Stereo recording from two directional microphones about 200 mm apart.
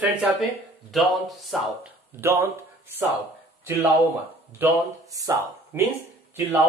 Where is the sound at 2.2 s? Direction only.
10° right (ahead or behind).